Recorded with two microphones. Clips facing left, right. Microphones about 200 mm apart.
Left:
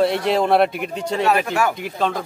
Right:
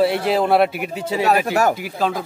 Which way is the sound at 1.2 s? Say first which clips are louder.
Right 2 dB; 40° right (ahead or behind).